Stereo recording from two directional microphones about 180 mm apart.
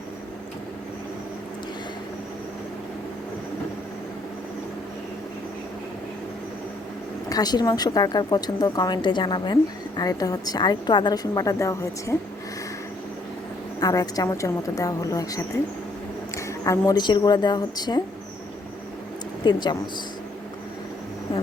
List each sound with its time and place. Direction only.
7.3 s speech: 20° left (ahead or behind)
13.7 s speech: 20° left (ahead or behind)
16.5 s speech: 15° left (ahead or behind)
19.5 s speech: 25° left (ahead or behind)